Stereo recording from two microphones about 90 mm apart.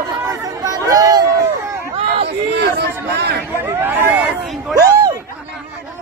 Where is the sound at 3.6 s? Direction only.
20° right (ahead or behind).